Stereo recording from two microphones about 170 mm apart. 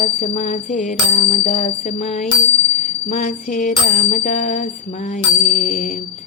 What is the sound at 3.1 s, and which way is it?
Mantra, 55° left (ahead or behind).